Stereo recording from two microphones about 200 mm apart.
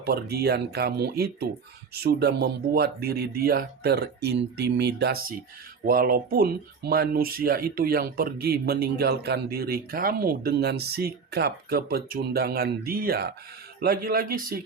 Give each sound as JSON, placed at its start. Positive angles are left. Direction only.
{"t": 0.0, "sound": "speech", "side_deg": -50}